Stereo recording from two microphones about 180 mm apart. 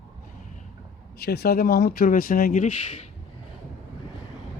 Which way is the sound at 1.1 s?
60° left (ahead or behind).